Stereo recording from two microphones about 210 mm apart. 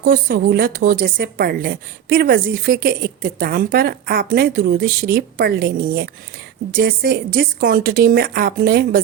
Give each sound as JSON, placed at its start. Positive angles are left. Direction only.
{"t": 0.0, "sound": "a woman's voice", "side_deg": -45}